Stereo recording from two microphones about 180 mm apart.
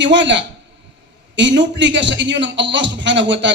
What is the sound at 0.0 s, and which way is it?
A man's voice, 85° right.